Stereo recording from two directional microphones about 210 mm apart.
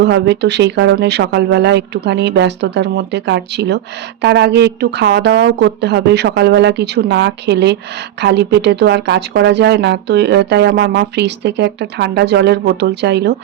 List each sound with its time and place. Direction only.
0.0 s speech: 55° right (ahead or behind)